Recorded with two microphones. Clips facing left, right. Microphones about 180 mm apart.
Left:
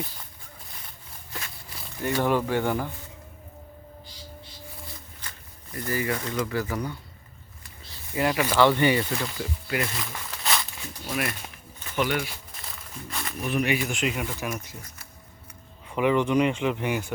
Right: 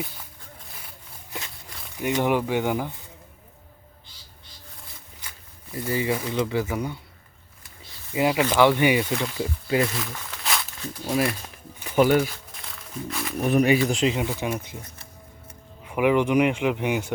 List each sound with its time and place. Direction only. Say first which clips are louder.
0.7 s a sound: right 1 dB; 5° right (ahead or behind)
2.0 s speech: right 1 dB; 15° right (ahead or behind)
5.9 s speech: right 3 dB; 15° right (ahead or behind)
8.1 s speech: right 3 dB; 15° right (ahead or behind)
9.4 s speech: right 6 dB; 25° right (ahead or behind)
9.9 s a sound: right 3 dB; centre (ahead or behind)
11.0 s speech: right 6 dB; 30° right (ahead or behind)
11.9 s speech: right 8 dB; 40° right (ahead or behind)
12.6 s music: right 7 dB; centre (ahead or behind)
13.4 s speech: right 7 dB; 40° right (ahead or behind)
15.9 s speech: right 2 dB; 15° right (ahead or behind)